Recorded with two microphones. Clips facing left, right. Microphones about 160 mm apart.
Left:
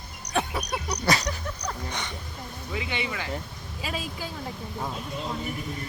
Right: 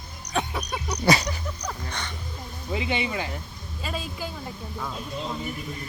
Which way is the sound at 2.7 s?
20° right (ahead or behind).